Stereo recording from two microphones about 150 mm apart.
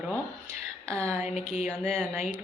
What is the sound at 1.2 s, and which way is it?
Speech, 45° left (ahead or behind).